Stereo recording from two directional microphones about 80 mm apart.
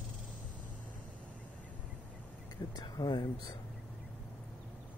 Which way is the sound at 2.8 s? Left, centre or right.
Left.